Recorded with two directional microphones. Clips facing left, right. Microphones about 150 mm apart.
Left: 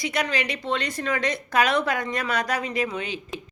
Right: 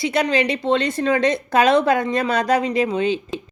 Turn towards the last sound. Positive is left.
turn(degrees=-25)  # may be behind; listen again after turning